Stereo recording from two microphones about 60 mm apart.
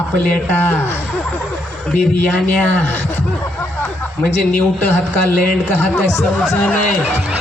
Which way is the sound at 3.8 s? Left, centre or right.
Left.